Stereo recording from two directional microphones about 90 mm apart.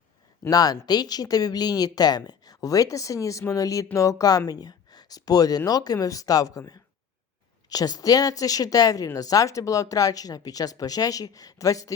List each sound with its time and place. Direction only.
0.5 s speech: 45° left (ahead or behind)